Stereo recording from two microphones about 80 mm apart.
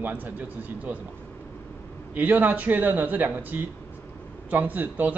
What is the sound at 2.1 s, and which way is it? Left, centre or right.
Speech, right.